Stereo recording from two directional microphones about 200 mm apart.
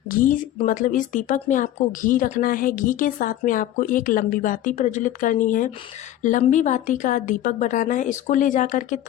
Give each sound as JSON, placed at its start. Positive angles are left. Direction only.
{"t": 0.6, "sound": "speech", "side_deg": 40}